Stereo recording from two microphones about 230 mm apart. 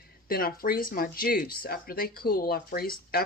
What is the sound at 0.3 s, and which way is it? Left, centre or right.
Speech, left.